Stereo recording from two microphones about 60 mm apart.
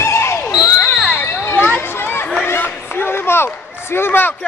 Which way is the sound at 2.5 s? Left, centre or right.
Left.